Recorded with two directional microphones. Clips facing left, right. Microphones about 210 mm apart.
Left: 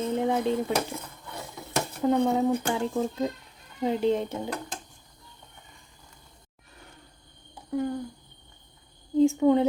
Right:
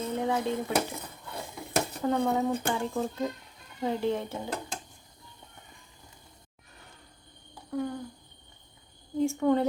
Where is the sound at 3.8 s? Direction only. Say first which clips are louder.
Left 4 dB; 20° left (ahead or behind).